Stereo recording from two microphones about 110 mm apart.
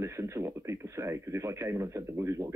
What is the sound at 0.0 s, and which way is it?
Radio, 25° right (ahead or behind).